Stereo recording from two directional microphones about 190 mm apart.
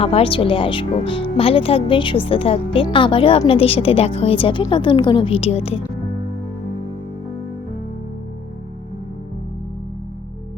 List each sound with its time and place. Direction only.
0.0 s speech: 30° left (ahead or behind)